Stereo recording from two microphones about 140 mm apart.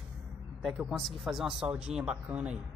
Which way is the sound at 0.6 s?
Centre (ahead or behind).